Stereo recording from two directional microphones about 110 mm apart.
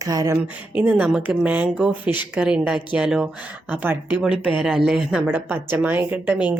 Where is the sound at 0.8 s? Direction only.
15° right (ahead or behind).